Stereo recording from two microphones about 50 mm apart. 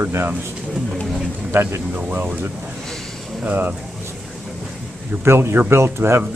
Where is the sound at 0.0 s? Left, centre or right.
Right.